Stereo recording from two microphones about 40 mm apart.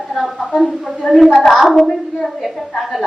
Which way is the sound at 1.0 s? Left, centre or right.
Left.